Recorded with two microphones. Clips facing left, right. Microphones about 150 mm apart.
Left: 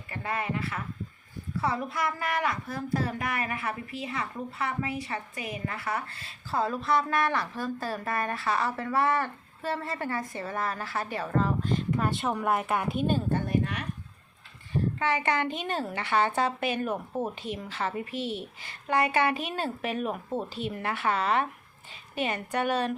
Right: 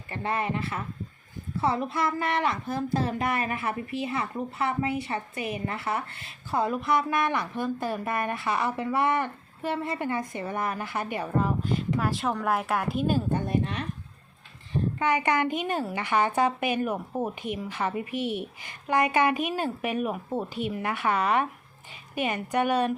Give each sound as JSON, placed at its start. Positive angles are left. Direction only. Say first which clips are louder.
{"t": 0.1, "sound": "a woman's voice", "louder": "right 3 dB", "side_deg": -30}
{"t": 13.5, "sound": "a woman's voice", "louder": "right 1 dB", "side_deg": -25}